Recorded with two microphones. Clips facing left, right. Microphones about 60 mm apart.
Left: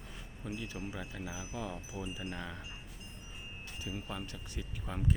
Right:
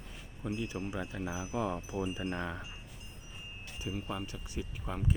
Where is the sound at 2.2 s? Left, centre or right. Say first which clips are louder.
Right 5 dB; right.